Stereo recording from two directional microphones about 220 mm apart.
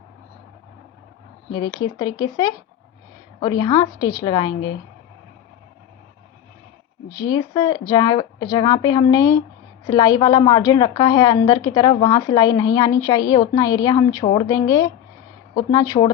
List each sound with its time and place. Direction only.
1.8 s a woman's voice: 20° left (ahead or behind)
7.1 s a woman's voice: 15° left (ahead or behind)